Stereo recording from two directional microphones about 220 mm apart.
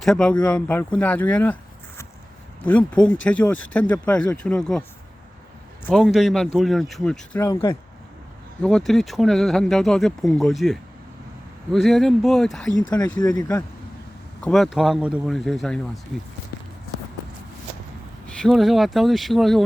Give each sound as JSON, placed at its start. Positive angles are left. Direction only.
{"t": 0.0, "sound": "speech", "side_deg": 5}
{"t": 2.6, "sound": "speech", "side_deg": 5}
{"t": 5.8, "sound": "speech", "side_deg": 0}
{"t": 8.6, "sound": "speech", "side_deg": 0}
{"t": 13.1, "sound": "speech", "side_deg": 20}
{"t": 14.4, "sound": "speech", "side_deg": 0}
{"t": 18.4, "sound": "speech", "side_deg": 0}